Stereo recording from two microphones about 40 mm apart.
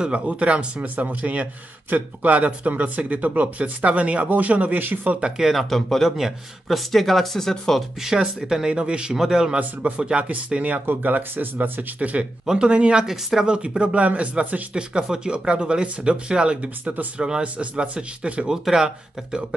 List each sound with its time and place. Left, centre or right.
0.0 s speech: right
0.7 s speech: right
5.4 s speech: centre
6.0 s speech: centre
8.2 s speech: centre
9.6 s speech: right
10.9 s speech: right
12.0 s speech: right
12.4 s speech: right
13.0 s speech: centre
13.5 s speech: right
14.7 s speech: right
18.5 s speech: centre